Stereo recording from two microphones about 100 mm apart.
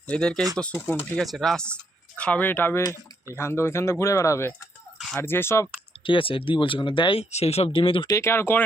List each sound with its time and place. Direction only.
0.1 s speech: 10° left (ahead or behind)
0.6 s speech: 20° left (ahead or behind)
1.1 s speech: 5° left (ahead or behind); by 5.6 s 25° left (ahead or behind)
6.1 s speech: 60° left (ahead or behind)
7.2 s speech: 90° left; by 8.0 s 60° left (ahead or behind)
8.1 s speech: 25° left (ahead or behind)